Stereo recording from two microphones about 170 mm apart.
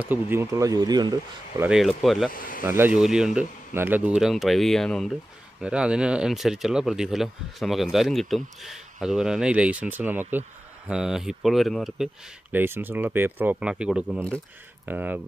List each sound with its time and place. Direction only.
0.0 s speech: 10° right (ahead or behind)
1.6 s speech: 5° right (ahead or behind)
2.3 s speech: 55° left (ahead or behind)
2.6 s speech: 15° right (ahead or behind)